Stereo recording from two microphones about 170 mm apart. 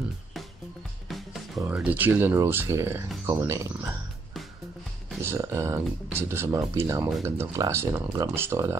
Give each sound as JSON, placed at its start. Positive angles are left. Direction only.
{"t": 1.1, "sound": "music", "side_deg": 0}
{"t": 1.6, "sound": "speech", "side_deg": -10}
{"t": 5.2, "sound": "speech", "side_deg": -15}